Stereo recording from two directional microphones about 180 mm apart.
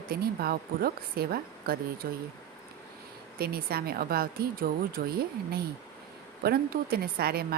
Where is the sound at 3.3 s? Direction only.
60° right (ahead or behind).